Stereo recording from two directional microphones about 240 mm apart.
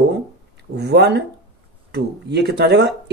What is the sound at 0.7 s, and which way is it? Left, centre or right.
Speech, right.